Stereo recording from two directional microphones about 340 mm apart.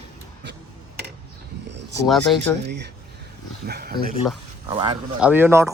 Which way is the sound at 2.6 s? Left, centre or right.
Right.